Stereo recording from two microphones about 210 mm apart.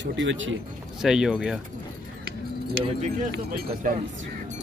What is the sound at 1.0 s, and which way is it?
Speech, centre (ahead or behind).